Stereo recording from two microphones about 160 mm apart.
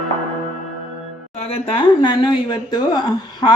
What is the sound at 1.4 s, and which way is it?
Speech, 35° left (ahead or behind).